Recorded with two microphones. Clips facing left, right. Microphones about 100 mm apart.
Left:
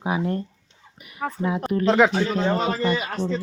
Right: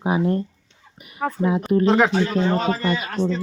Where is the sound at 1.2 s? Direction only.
5° right (ahead or behind).